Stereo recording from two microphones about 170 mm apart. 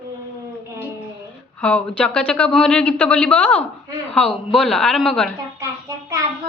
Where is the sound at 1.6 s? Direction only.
5° left (ahead or behind).